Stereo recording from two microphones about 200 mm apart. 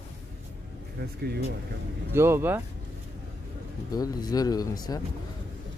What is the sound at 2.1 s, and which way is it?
Speech, 10° right (ahead or behind).